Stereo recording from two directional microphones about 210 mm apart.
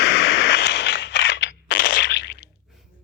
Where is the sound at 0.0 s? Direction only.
60° left (ahead or behind).